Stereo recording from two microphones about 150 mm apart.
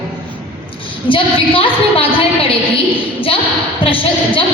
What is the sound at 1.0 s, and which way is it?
A woman's voice, 35° left (ahead or behind).